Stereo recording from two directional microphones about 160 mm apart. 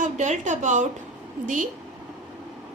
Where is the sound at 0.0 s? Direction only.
50° right (ahead or behind).